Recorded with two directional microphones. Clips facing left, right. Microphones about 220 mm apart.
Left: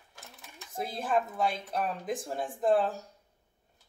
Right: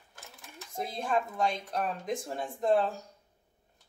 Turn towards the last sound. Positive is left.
turn(degrees=0)  # may be behind; listen again after turning